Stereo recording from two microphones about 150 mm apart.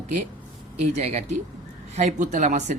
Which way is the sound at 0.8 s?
45° right (ahead or behind).